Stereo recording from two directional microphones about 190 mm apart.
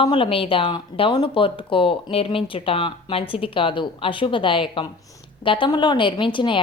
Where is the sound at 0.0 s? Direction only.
30° left (ahead or behind).